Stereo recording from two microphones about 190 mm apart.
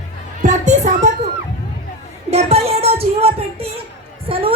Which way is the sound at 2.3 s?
30° right (ahead or behind).